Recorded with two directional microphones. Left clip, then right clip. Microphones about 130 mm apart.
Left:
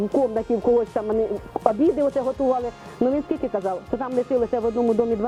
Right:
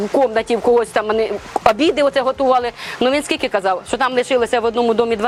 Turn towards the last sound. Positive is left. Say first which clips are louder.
# right 5 dB
turn(degrees=25)  # may be behind; listen again after turning